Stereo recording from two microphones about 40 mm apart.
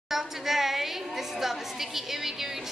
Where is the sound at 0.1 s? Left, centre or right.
Centre.